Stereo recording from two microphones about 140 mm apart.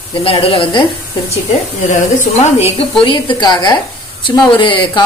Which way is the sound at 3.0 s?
35° left (ahead or behind).